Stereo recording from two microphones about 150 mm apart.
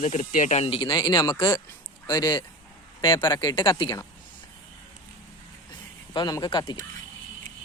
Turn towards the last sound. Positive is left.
turn(degrees=30)  # may be behind; listen again after turning